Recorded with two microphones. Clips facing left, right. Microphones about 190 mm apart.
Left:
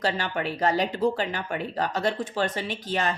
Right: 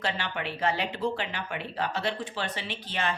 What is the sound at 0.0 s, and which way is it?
A woman's voice, 40° left (ahead or behind).